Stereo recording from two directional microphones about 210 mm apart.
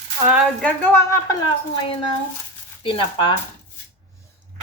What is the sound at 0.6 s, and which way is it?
Speech, 10° left (ahead or behind).